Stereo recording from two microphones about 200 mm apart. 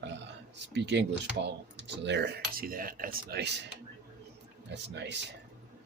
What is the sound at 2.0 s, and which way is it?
Speech, 60° right (ahead or behind).